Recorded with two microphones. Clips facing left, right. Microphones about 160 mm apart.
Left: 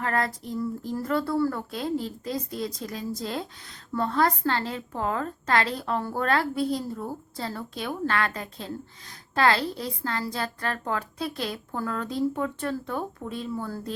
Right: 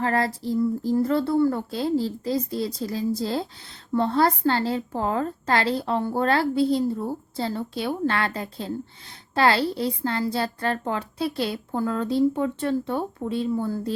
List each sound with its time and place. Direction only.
0.0 s a woman's voice: 30° right (ahead or behind)